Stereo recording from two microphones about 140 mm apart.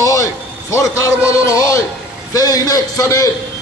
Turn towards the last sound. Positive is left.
turn(degrees=25)  # may be behind; listen again after turning